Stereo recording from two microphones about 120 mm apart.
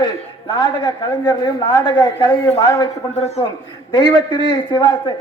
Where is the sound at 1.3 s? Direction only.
40° left (ahead or behind).